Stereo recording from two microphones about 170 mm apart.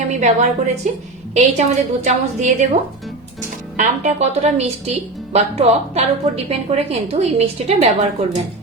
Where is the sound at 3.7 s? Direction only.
40° right (ahead or behind).